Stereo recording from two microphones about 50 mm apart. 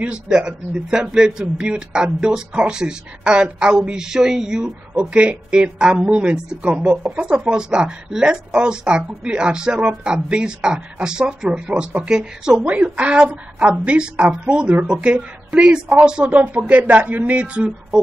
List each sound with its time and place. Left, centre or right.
0.0 s speech: centre
7.2 s speech: centre
12.6 s speech: right
16.3 s speech: right